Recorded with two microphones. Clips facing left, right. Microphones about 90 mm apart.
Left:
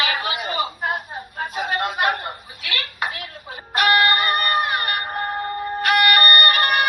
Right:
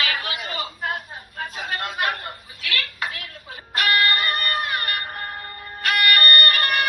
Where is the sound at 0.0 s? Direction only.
20° left (ahead or behind).